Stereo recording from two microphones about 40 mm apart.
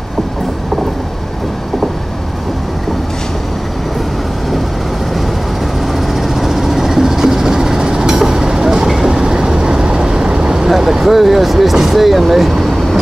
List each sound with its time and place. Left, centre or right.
6.4 s train: centre
9.1 s vehicle: centre
10.7 s speech: centre